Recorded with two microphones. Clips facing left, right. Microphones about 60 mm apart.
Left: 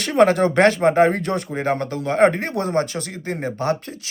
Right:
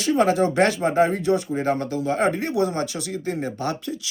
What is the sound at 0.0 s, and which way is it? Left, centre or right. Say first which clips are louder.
Speech: left 3 dB; left.